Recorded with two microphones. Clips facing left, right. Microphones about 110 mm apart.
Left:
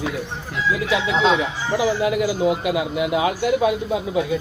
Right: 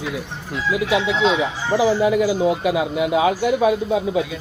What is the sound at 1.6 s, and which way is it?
Speech, 30° right (ahead or behind).